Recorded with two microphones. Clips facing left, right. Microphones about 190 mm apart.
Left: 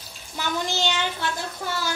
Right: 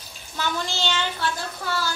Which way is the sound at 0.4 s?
15° left (ahead or behind).